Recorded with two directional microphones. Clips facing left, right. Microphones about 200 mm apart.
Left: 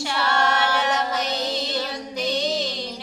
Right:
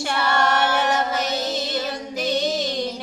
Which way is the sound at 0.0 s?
50° right (ahead or behind).